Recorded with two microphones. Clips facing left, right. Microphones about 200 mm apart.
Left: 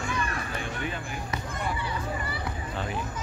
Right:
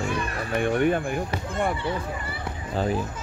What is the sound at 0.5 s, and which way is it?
Speech, 60° right (ahead or behind).